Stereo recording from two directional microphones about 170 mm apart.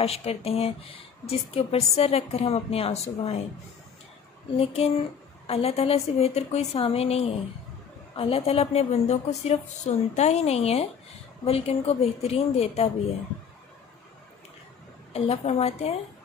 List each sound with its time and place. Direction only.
0.0 s speech: 35° left (ahead or behind)
4.6 s speech: 35° left (ahead or behind)
15.1 s speech: 35° left (ahead or behind)